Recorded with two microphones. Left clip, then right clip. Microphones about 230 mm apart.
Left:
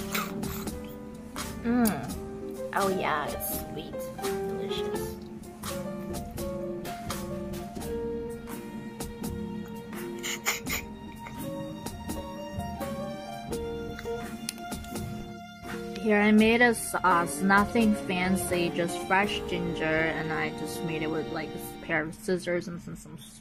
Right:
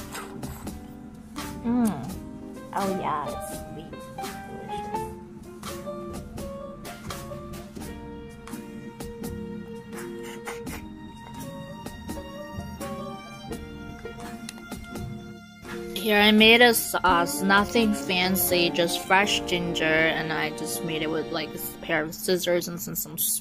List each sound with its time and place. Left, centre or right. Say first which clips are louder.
0.1 s music: left 6 dB; centre
1.6 s speech: even; centre
10.2 s music: left 4 dB; centre
16.1 s speech: right 6 dB; centre